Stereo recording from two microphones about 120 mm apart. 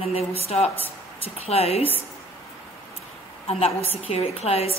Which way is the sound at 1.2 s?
55° left (ahead or behind).